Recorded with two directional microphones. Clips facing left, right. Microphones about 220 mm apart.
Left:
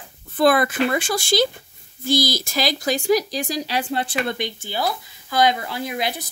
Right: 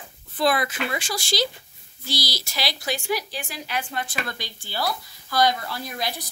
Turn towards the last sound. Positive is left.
turn(degrees=20)  # may be behind; listen again after turning